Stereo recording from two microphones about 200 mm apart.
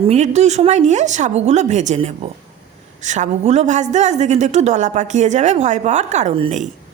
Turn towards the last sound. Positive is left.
turn(degrees=-35)  # may be behind; listen again after turning